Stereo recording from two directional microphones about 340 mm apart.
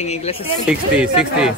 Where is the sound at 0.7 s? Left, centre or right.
Centre.